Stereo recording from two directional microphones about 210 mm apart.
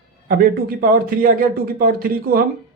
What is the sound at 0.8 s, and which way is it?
Speech, 45° right (ahead or behind).